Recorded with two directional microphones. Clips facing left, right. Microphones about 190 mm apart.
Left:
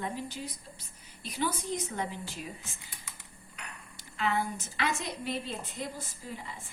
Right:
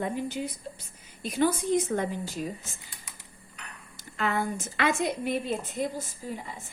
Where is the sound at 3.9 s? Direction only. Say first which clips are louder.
Right 2 dB; 50° right (ahead or behind).